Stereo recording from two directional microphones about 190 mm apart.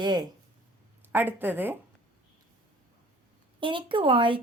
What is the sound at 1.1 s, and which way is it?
Speech, 10° right (ahead or behind).